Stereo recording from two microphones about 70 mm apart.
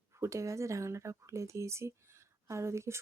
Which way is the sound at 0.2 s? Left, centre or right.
Right.